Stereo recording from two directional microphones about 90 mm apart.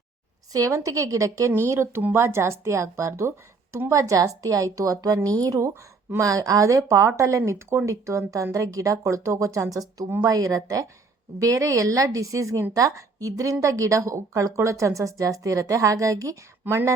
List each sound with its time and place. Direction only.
0.5 s a woman's voice: 40° right (ahead or behind)